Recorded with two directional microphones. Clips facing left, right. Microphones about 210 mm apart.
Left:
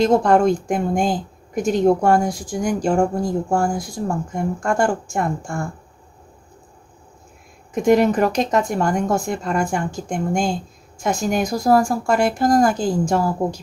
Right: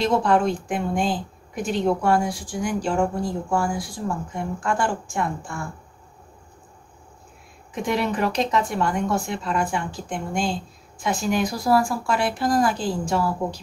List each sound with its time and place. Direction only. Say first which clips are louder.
0.0 s a woman's voice: left 5 dB; 45° left (ahead or behind)
7.7 s a woman's voice: left 9 dB; 45° left (ahead or behind)